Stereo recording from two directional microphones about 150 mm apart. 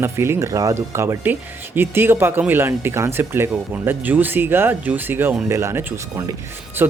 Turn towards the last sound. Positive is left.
turn(degrees=-15)  # may be behind; listen again after turning